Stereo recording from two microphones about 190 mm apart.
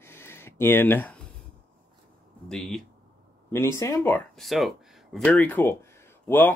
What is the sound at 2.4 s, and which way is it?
Speech, centre (ahead or behind).